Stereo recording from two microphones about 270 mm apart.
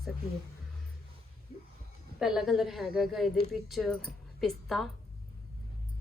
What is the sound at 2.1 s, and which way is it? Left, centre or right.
A woman's voice, centre.